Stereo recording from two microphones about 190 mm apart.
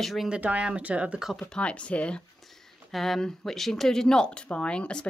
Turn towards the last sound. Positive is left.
turn(degrees=5)  # may be behind; listen again after turning